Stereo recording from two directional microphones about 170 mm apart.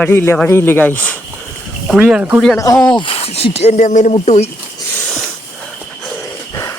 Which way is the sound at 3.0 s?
35° left (ahead or behind).